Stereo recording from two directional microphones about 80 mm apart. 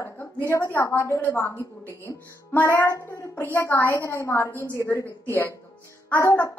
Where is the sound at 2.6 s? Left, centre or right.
Left.